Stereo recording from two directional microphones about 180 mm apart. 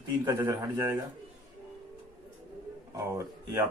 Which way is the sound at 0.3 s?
20° right (ahead or behind).